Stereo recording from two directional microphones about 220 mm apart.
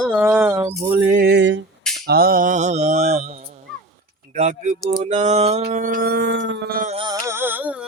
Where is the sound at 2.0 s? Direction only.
45° right (ahead or behind).